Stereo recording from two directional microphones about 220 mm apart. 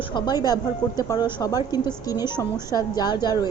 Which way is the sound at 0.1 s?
20° left (ahead or behind).